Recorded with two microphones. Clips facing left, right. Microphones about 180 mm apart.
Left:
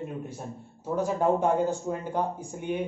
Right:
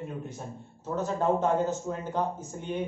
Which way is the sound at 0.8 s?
10° left (ahead or behind).